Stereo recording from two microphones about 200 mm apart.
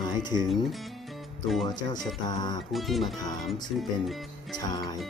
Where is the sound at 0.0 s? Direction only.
20° left (ahead or behind).